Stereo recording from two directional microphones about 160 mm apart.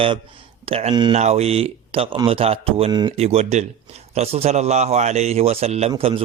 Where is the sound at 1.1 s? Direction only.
45° right (ahead or behind).